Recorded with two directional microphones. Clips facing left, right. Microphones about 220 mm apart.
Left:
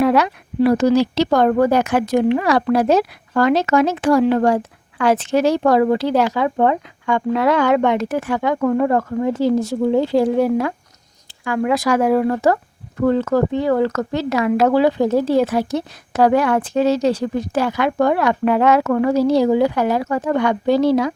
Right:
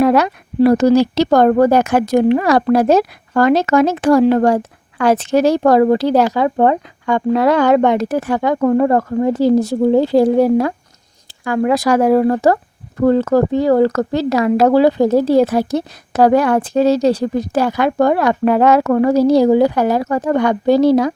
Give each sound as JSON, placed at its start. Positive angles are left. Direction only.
{"t": 0.0, "sound": "speech", "side_deg": -45}